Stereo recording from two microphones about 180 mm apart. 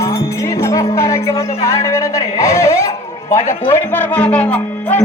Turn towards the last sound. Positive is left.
turn(degrees=10)  # may be behind; listen again after turning